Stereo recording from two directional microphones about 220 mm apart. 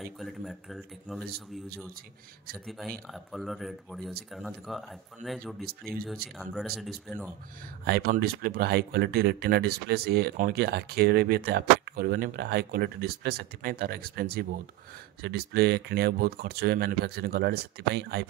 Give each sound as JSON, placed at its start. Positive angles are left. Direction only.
{"t": 0.0, "sound": "speech", "side_deg": 0}
{"t": 3.1, "sound": "speech", "side_deg": 0}
{"t": 7.8, "sound": "speech", "side_deg": -45}